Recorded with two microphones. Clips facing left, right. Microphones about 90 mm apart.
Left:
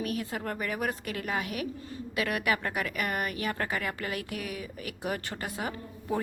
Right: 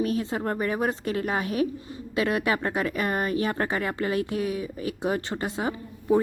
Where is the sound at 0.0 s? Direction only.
30° right (ahead or behind).